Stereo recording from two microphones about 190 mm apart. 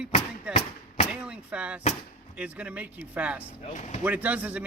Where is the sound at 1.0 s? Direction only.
5° right (ahead or behind).